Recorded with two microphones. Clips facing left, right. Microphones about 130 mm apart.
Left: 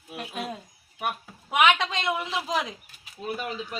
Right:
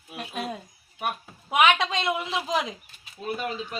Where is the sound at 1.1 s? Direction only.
Centre (ahead or behind).